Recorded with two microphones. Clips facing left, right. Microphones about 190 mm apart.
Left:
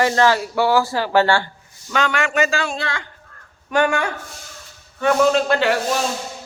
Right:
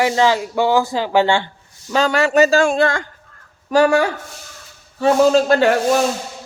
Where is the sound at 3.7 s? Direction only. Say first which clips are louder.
Right 5 dB; 35° right (ahead or behind).